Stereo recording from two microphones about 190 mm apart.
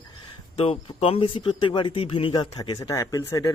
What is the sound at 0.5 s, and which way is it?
Speech, 30° left (ahead or behind).